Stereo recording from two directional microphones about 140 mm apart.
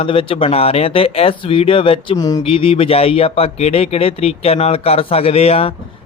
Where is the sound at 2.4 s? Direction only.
45° left (ahead or behind).